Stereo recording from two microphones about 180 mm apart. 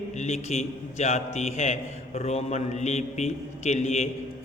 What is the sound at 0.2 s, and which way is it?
A man's voice, 40° left (ahead or behind).